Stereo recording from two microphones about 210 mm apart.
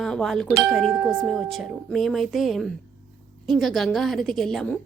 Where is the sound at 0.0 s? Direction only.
Centre (ahead or behind).